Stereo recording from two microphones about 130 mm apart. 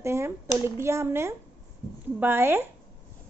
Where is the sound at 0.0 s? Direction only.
20° right (ahead or behind).